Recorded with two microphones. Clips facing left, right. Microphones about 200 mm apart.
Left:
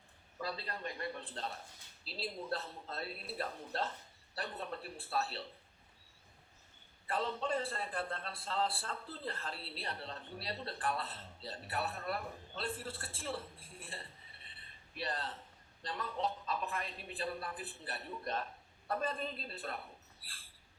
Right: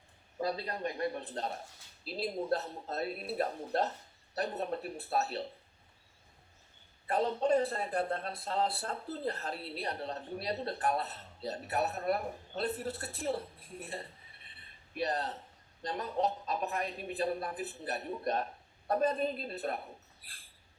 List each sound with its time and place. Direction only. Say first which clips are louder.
0.3 s speech: right 7 dB; 45° right (ahead or behind)
7.1 s speech: right 7 dB; 40° right (ahead or behind)